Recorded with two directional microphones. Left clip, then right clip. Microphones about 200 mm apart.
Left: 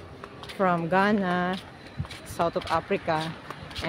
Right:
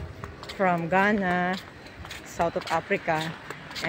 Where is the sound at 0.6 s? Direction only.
10° left (ahead or behind).